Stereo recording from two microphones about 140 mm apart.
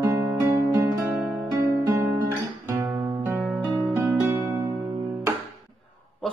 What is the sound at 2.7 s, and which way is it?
Guitar, 20° right (ahead or behind).